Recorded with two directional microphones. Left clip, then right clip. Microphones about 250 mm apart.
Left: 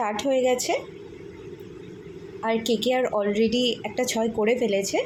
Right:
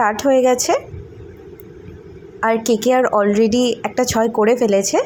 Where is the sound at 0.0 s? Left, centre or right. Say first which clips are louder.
Right 9 dB; right.